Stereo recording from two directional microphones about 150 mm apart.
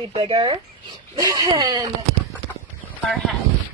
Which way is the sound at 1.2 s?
25° right (ahead or behind).